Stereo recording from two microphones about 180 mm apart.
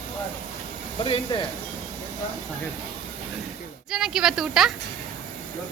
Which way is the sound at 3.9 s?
5° right (ahead or behind).